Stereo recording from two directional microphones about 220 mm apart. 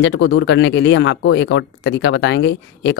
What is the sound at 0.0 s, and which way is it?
Speech, 55° left (ahead or behind).